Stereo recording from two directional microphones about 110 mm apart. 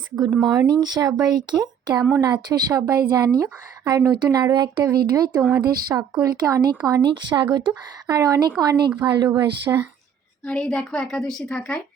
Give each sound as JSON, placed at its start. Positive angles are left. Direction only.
{"t": 0.3, "sound": "speech", "side_deg": 5}
{"t": 0.8, "sound": "speech", "side_deg": -40}
{"t": 10.4, "sound": "a woman's voice", "side_deg": 5}